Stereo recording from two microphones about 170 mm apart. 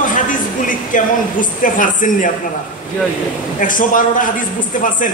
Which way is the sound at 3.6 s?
50° left (ahead or behind).